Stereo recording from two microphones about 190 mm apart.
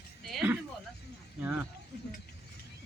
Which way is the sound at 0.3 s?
5° right (ahead or behind).